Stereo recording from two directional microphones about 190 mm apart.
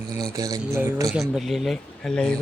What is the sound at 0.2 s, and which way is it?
Speech, 20° right (ahead or behind).